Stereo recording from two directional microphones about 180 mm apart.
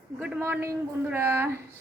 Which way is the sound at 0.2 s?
10° right (ahead or behind).